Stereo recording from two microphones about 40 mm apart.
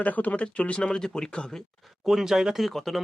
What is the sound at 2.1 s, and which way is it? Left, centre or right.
Speech, centre.